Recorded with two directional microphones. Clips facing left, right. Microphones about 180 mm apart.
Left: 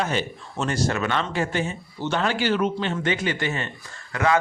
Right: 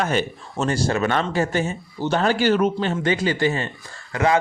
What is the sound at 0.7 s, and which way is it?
A man's voice, 30° right (ahead or behind).